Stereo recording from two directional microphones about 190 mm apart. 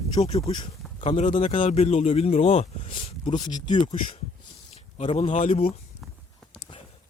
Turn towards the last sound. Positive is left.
turn(degrees=30)  # may be behind; listen again after turning